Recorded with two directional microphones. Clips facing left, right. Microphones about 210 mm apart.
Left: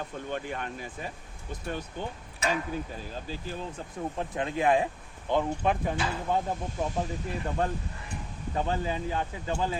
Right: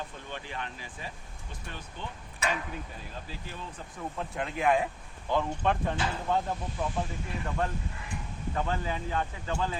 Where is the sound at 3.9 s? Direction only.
25° left (ahead or behind).